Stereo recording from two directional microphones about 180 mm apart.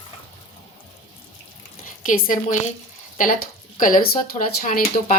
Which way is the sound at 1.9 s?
45° left (ahead or behind).